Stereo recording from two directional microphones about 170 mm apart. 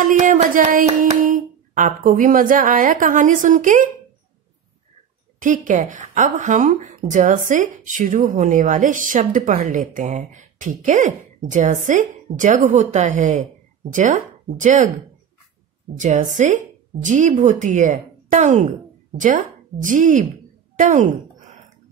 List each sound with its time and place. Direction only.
0.0 s a woman's voice: 50° right (ahead or behind)
5.4 s a woman's voice: 50° right (ahead or behind)
16.0 s speech: 45° right (ahead or behind)